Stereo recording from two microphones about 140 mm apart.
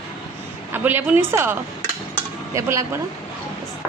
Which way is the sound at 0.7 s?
15° right (ahead or behind).